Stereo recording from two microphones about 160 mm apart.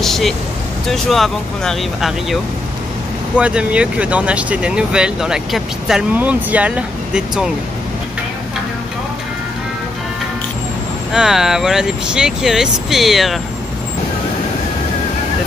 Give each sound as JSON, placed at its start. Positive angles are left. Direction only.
{"t": 0.0, "sound": "vehicle", "side_deg": 0}
{"t": 0.8, "sound": "speech", "side_deg": 0}
{"t": 3.3, "sound": "speech", "side_deg": -5}
{"t": 11.1, "sound": "speech", "side_deg": -5}